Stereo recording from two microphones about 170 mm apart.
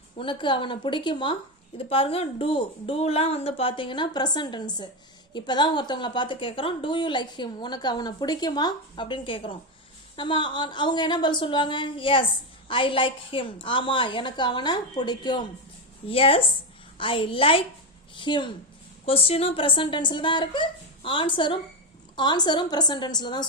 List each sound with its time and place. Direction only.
0.2 s a woman's voice: 30° left (ahead or behind)